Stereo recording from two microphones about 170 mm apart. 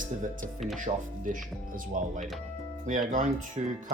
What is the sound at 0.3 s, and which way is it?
Speech, 5° left (ahead or behind).